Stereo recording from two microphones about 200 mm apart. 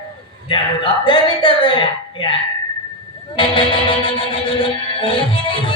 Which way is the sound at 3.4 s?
25° left (ahead or behind).